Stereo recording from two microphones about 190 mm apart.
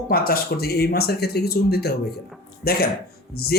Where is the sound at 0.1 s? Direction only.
50° left (ahead or behind).